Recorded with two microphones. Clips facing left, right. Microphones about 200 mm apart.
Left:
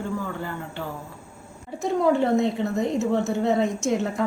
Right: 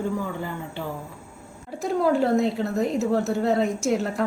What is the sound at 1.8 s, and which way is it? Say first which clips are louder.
A woman's voice: even; centre (ahead or behind).